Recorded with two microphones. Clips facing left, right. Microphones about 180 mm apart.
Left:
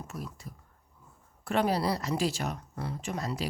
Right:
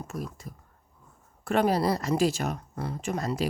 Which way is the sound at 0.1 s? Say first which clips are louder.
Right 5 dB; 45° right (ahead or behind).